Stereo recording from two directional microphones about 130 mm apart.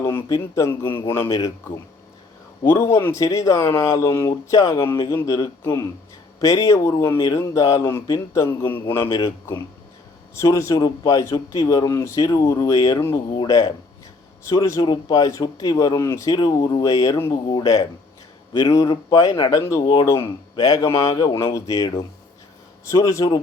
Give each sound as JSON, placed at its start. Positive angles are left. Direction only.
{"t": 0.0, "sound": "speech", "side_deg": 15}
{"t": 9.0, "sound": "speech", "side_deg": 30}
{"t": 10.3, "sound": "speech", "side_deg": 20}
{"t": 22.9, "sound": "speech", "side_deg": 25}